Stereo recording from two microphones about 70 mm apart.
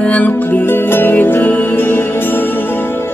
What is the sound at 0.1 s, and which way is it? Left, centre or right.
Music, left.